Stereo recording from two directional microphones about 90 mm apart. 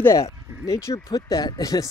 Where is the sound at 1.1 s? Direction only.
45° left (ahead or behind).